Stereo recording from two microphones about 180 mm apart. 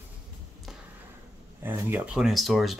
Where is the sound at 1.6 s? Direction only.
10° right (ahead or behind).